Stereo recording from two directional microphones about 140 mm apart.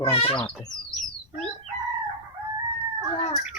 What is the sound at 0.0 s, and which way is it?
Speech, 40° left (ahead or behind).